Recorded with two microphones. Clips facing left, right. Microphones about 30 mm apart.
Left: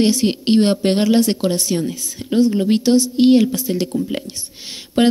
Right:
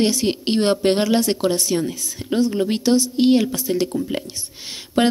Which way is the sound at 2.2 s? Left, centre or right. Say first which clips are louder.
Left 1 dB; centre.